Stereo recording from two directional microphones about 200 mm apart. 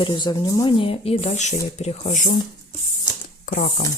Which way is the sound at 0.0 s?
20° left (ahead or behind).